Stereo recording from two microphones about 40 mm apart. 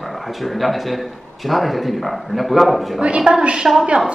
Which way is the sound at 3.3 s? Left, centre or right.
Right.